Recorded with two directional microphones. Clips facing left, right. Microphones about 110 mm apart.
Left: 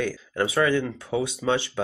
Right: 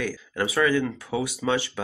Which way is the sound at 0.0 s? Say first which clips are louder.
Left 2 dB; 25° left (ahead or behind).